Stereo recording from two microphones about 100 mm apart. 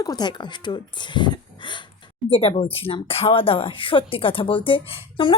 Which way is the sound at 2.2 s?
70° left (ahead or behind).